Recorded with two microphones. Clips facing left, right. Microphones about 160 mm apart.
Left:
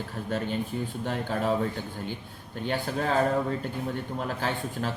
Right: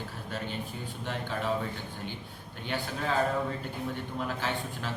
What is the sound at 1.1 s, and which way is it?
Speech, 45° left (ahead or behind).